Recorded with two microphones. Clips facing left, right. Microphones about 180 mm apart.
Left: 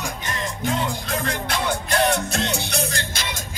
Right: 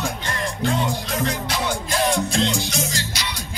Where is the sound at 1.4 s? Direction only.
65° left (ahead or behind).